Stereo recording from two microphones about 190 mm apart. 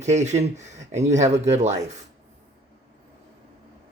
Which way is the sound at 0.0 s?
35° right (ahead or behind).